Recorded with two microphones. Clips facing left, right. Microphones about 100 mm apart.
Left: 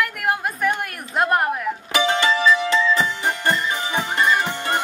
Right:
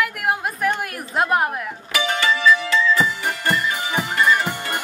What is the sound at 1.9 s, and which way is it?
Music, 25° left (ahead or behind).